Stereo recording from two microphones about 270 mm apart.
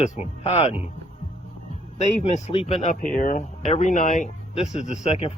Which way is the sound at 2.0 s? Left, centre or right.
Left.